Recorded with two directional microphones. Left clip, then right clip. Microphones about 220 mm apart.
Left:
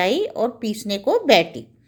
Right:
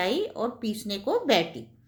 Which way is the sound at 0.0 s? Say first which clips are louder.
Left 7 dB; 35° left (ahead or behind).